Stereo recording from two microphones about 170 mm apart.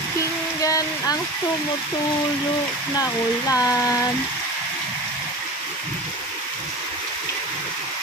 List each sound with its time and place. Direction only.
0.6 s speech: 20° left (ahead or behind)
3.0 s speech: 20° left (ahead or behind)